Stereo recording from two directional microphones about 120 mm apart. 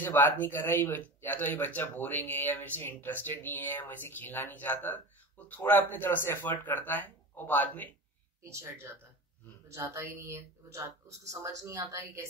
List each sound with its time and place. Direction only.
0.0 s speech: 15° left (ahead or behind)
8.5 s speech: 20° right (ahead or behind)